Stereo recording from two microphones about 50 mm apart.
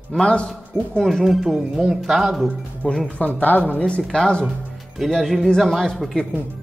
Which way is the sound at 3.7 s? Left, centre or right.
Centre.